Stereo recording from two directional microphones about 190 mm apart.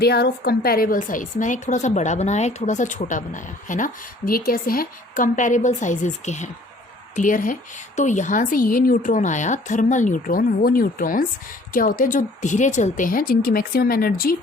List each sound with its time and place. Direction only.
0.0 s a woman's voice: 55° left (ahead or behind)